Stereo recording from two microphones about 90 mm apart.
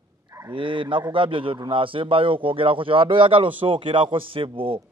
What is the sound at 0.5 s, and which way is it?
A man's voice, 70° right (ahead or behind).